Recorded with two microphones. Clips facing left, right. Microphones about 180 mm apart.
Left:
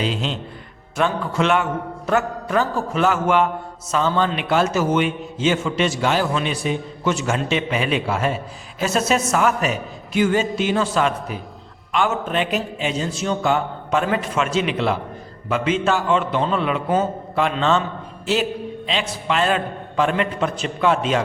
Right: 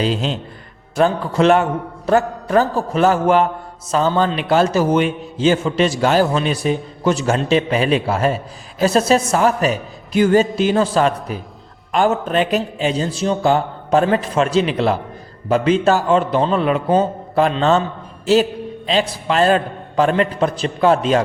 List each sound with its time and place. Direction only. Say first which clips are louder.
0.0 s a man's voice: right 4 dB; 40° right (ahead or behind)
18.9 s a man's voice: right 6 dB; 40° right (ahead or behind)